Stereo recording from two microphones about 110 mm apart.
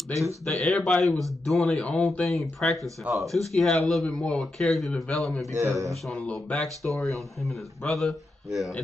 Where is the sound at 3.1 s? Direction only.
10° right (ahead or behind).